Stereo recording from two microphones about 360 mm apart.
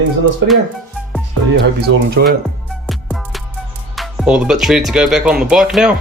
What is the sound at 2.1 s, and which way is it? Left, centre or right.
Speech, right.